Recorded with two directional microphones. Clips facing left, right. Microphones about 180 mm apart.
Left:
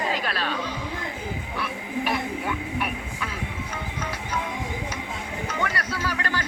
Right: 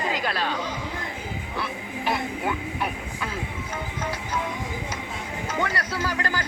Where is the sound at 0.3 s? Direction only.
25° right (ahead or behind).